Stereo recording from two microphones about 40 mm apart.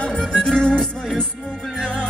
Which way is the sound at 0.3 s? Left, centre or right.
Left.